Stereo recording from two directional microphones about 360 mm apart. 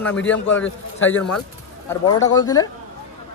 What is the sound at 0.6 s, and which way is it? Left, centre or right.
Speech, left.